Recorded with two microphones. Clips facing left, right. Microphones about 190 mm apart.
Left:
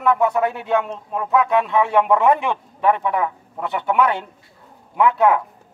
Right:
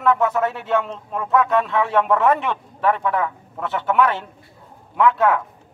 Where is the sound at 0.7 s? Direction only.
15° left (ahead or behind).